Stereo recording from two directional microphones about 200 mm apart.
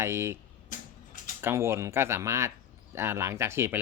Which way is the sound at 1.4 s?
10° right (ahead or behind).